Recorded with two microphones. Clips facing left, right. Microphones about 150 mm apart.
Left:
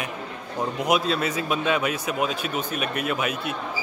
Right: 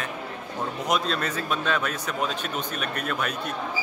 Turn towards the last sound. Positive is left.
turn(degrees=5)  # may be behind; listen again after turning